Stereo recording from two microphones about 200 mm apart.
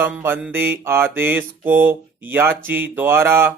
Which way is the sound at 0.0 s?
10° right (ahead or behind).